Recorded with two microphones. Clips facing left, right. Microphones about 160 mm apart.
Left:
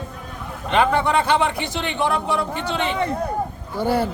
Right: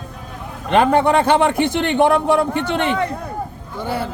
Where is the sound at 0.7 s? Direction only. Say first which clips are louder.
Right 4 dB; 50° right (ahead or behind).